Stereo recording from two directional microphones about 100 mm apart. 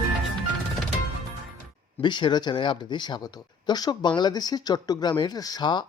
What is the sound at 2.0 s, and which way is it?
Speech, 50° left (ahead or behind).